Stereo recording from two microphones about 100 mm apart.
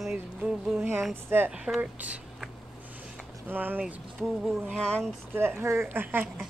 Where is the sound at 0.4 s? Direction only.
10° right (ahead or behind).